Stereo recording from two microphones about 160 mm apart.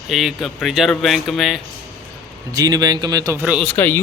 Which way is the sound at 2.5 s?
25° right (ahead or behind).